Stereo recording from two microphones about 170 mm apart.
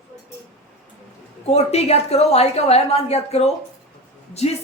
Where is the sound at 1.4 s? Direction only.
40° left (ahead or behind).